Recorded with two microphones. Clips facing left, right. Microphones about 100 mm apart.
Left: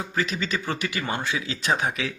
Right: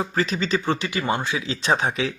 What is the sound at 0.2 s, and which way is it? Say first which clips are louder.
Speech: right 3 dB; 35° right (ahead or behind).